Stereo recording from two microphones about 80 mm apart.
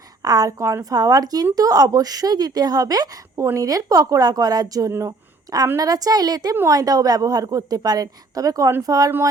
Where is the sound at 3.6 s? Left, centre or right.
Right.